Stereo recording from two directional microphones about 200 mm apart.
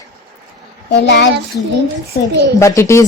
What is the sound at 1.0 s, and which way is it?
Speech, 60° left (ahead or behind).